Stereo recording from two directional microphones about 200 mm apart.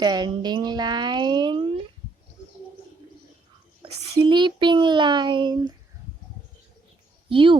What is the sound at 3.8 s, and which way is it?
Speech, 25° right (ahead or behind).